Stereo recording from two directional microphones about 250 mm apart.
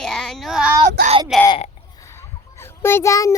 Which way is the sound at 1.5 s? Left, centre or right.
Centre.